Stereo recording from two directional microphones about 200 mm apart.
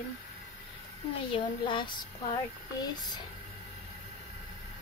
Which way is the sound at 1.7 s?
25° left (ahead or behind).